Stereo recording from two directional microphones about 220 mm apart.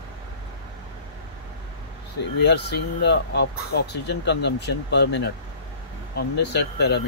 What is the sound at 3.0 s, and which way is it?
Speech, 50° left (ahead or behind).